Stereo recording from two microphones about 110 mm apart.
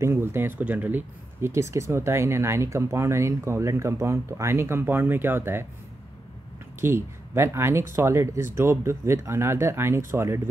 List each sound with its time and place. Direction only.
0.0 s speech: 25° right (ahead or behind)
6.8 s speech: 25° right (ahead or behind)